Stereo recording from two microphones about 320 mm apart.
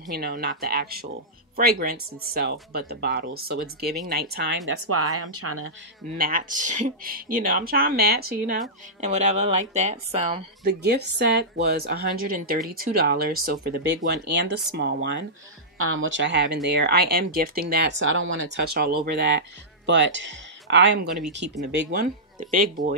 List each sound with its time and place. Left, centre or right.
0.1 s speech: right
6.1 s speech: right
11.1 s speech: right
22.4 s speech: right